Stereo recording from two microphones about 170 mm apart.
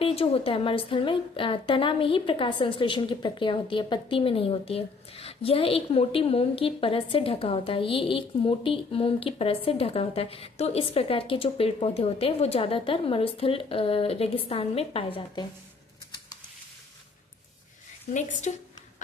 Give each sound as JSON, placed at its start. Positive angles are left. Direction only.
{"t": 0.0, "sound": "a woman's voice", "side_deg": 35}
{"t": 18.5, "sound": "a woman's voice", "side_deg": 45}